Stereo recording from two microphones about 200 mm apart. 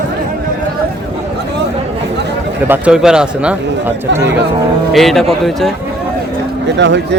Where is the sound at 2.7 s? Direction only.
5° right (ahead or behind).